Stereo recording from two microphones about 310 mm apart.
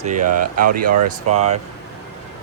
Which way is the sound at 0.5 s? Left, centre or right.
Right.